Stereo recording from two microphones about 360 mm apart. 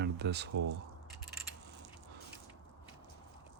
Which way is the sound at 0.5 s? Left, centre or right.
Right.